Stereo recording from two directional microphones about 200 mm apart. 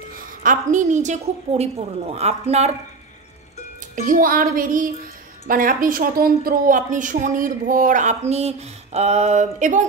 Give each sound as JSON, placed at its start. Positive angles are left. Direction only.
{"t": 0.1, "sound": "a woman's voice", "side_deg": -40}
{"t": 3.9, "sound": "a woman's voice", "side_deg": -40}